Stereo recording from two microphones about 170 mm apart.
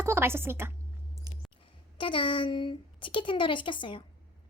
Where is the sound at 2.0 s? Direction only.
30° left (ahead or behind).